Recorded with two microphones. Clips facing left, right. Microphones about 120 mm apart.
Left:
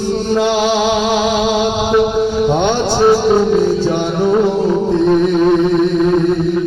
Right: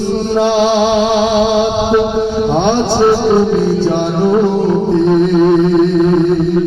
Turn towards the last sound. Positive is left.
turn(degrees=-5)  # may be behind; listen again after turning